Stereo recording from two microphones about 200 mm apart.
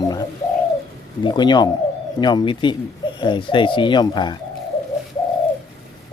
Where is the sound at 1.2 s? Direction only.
20° left (ahead or behind).